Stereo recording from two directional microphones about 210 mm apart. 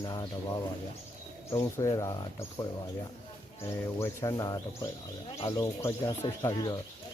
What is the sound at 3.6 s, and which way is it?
Speech, 15° left (ahead or behind).